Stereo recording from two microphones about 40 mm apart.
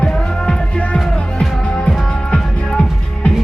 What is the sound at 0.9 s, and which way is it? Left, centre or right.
Music, centre.